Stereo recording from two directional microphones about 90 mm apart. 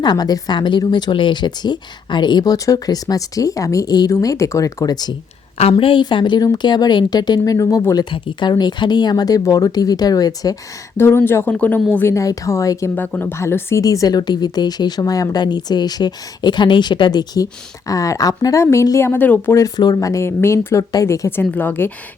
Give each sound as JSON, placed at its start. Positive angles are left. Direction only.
{"t": 0.0, "sound": "speech", "side_deg": 50}
{"t": 5.7, "sound": "a woman's voice", "side_deg": 65}
{"t": 8.1, "sound": "speech", "side_deg": 55}
{"t": 10.9, "sound": "speech", "side_deg": 25}
{"t": 11.9, "sound": "speech", "side_deg": 30}
{"t": 13.0, "sound": "speech", "side_deg": 20}
{"t": 13.8, "sound": "speech", "side_deg": 40}
{"t": 19.5, "sound": "speech", "side_deg": 45}
{"t": 21.2, "sound": "speech", "side_deg": 20}